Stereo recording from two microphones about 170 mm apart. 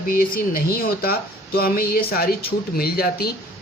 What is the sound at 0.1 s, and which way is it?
Speech, 60° left (ahead or behind).